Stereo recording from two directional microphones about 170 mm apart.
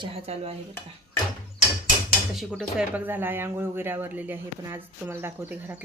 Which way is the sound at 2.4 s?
Centre (ahead or behind).